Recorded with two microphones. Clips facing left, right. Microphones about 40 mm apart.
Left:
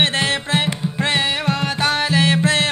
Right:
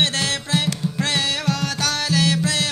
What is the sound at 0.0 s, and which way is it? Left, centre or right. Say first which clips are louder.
Music: left 3 dB; left.